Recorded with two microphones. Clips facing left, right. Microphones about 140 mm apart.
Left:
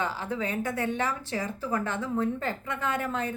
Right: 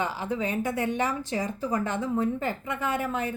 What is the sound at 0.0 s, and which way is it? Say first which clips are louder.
A woman's voice: right 2 dB; 15° right (ahead or behind).